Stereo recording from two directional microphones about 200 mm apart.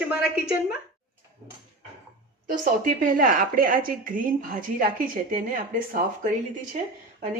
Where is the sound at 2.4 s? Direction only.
40° right (ahead or behind).